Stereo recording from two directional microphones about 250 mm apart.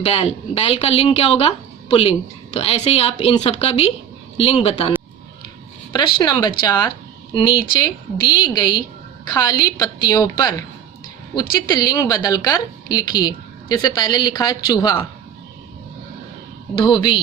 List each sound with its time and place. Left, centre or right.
0.0 s a woman's voice: left
16.7 s a woman's voice: centre